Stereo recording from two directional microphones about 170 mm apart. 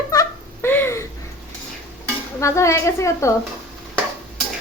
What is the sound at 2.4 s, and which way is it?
Speech, 15° left (ahead or behind).